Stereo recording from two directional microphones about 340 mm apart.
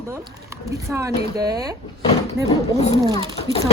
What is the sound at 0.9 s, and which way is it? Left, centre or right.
Speech, centre.